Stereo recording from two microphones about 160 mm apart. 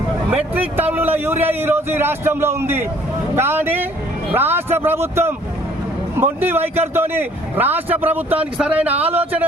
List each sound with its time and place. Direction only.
0.8 s a man's voice: 10° right (ahead or behind)
8.9 s speech: 40° right (ahead or behind)
9.1 s a man's voice: 10° right (ahead or behind)